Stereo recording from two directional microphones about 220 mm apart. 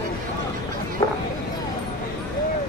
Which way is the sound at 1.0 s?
15° left (ahead or behind).